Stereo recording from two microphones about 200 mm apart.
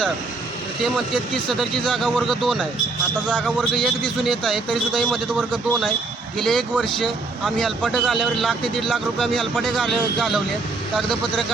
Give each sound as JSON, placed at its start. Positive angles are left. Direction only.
{"t": 0.9, "sound": "speech", "side_deg": 0}